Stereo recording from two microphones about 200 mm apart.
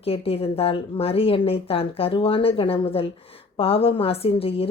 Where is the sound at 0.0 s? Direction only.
30° left (ahead or behind).